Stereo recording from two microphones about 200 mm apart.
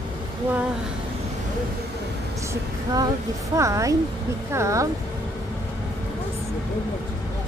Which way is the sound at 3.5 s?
15° right (ahead or behind).